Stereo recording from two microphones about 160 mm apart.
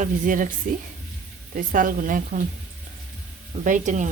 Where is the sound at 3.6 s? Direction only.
50° right (ahead or behind).